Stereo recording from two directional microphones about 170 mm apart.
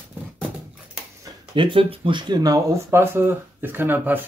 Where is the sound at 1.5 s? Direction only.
30° right (ahead or behind).